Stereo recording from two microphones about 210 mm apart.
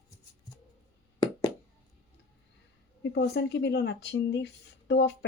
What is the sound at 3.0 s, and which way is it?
Speech, 50° left (ahead or behind).